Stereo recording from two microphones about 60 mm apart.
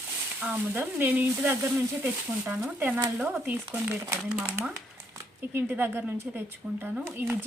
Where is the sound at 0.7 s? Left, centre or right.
Right.